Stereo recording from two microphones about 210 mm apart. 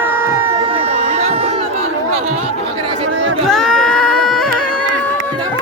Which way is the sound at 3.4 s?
Centre (ahead or behind).